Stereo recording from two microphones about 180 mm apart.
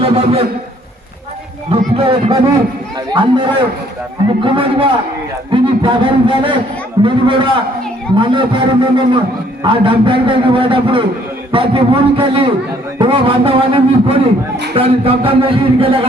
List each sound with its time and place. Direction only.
0.0 s a man's voice: 30° right (ahead or behind)
1.7 s music: 30° right (ahead or behind)
3.1 s a man's voice: 25° right (ahead or behind)
14.8 s music: 30° right (ahead or behind)